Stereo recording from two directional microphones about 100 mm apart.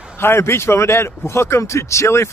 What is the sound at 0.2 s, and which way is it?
Speech, 25° left (ahead or behind).